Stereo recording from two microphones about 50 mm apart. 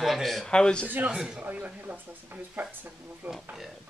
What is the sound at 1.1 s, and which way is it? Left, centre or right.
Speech, centre.